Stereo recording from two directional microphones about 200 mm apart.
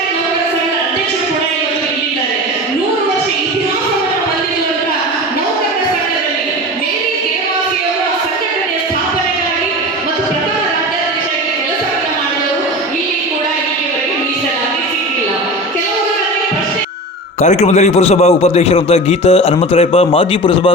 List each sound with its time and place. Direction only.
17.4 s a man's voice: 35° left (ahead or behind)